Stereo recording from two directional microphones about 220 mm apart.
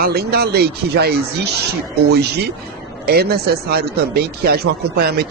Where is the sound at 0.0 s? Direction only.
45° right (ahead or behind).